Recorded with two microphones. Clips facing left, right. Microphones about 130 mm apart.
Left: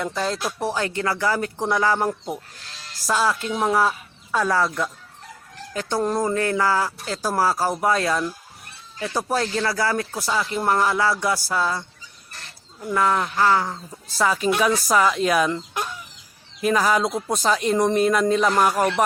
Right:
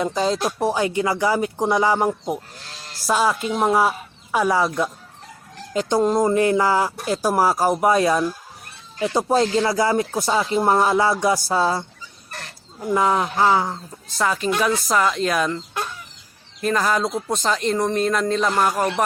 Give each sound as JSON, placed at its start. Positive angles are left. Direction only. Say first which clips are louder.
{"t": 0.0, "sound": "speech", "louder": "right 4 dB", "side_deg": -20}
{"t": 12.8, "sound": "speech", "louder": "right 2 dB", "side_deg": -15}
{"t": 13.7, "sound": "speech", "louder": "left 1 dB", "side_deg": 0}